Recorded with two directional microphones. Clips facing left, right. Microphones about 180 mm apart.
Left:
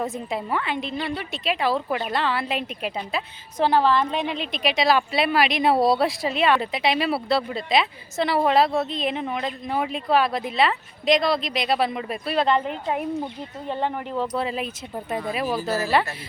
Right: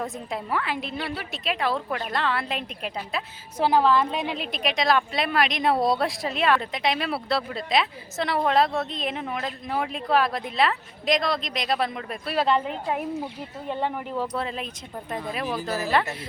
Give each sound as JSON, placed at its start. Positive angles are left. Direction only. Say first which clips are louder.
{"t": 0.0, "sound": "a woman's voice", "louder": "left 4 dB", "side_deg": 0}
{"t": 14.3, "sound": "a woman's voice", "louder": "left 4 dB", "side_deg": 5}